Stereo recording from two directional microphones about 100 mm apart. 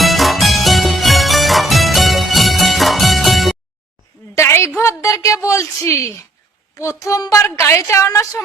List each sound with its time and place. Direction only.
0.0 s music: centre (ahead or behind)
4.4 s a sound: 25° left (ahead or behind)
4.8 s a woman's voice: 30° left (ahead or behind)